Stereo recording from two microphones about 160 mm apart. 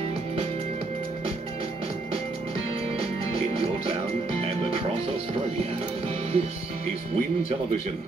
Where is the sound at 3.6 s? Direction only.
35° right (ahead or behind).